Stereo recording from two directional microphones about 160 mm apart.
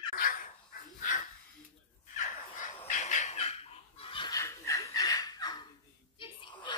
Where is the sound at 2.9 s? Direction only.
50° left (ahead or behind); by 4.4 s 30° left (ahead or behind).